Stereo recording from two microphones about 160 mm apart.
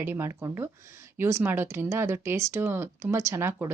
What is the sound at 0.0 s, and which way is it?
Speech, 15° right (ahead or behind).